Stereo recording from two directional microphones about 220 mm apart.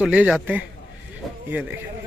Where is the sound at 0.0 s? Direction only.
5° right (ahead or behind).